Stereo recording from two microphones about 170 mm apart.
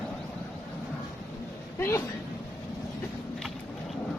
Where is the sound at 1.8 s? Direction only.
15° left (ahead or behind).